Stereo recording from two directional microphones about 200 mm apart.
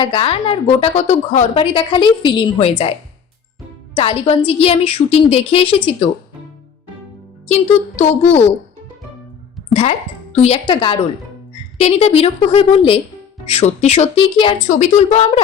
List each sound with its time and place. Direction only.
0.0 s a woman's voice: 25° left (ahead or behind)
3.9 s a woman's voice: 30° left (ahead or behind)
7.4 s a child's voice: 35° left (ahead or behind)
10.3 s a woman's voice: 30° left (ahead or behind)
14.7 s a child's voice: 35° left (ahead or behind)